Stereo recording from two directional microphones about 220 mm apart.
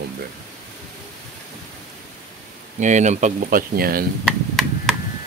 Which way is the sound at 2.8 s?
35° right (ahead or behind).